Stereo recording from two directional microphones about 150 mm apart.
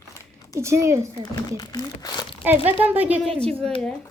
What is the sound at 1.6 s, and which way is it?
Speech, 25° left (ahead or behind).